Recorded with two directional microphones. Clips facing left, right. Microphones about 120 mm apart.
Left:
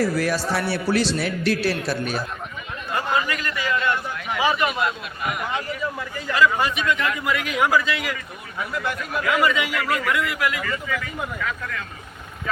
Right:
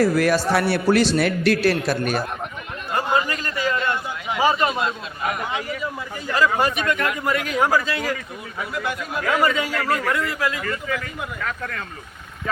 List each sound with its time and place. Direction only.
0.2 s a man's voice: 60° right (ahead or behind)
2.9 s a man's voice: 25° right (ahead or behind)
6.3 s a man's voice: 40° right (ahead or behind)
8.7 s a man's voice: 15° right (ahead or behind)
9.2 s speech: 35° right (ahead or behind)